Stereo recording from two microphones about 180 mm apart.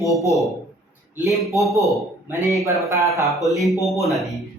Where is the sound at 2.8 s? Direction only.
15° right (ahead or behind).